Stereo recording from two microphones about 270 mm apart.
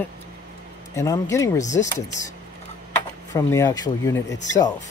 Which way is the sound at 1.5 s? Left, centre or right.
Left.